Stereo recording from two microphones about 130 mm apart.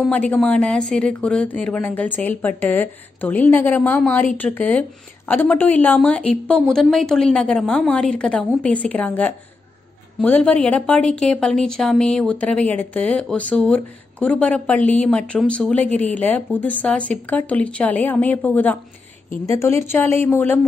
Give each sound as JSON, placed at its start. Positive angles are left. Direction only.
{"t": 0.1, "sound": "a woman's voice", "side_deg": 10}